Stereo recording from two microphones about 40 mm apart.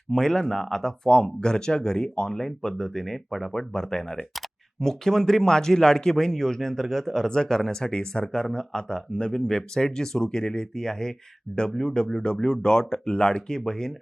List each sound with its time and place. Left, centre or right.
0.1 s speech: centre